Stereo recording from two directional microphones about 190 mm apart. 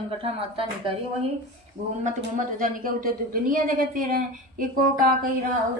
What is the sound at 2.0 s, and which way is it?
Speech, 45° right (ahead or behind).